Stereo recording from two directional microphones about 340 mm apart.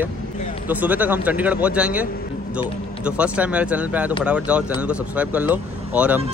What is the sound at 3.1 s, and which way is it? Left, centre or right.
Speech, centre.